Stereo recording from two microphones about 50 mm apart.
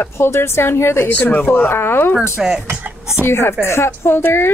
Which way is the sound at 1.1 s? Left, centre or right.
Left.